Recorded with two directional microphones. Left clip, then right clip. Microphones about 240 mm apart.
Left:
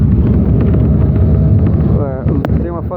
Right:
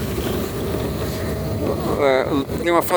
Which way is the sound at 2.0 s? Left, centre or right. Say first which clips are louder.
Right 5 dB; right.